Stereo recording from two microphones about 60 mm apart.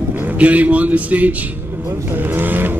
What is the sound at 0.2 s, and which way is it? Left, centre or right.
Speech, right.